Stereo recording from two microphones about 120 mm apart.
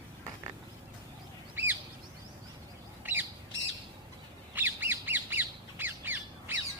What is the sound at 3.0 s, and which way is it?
Squawk, 15° right (ahead or behind).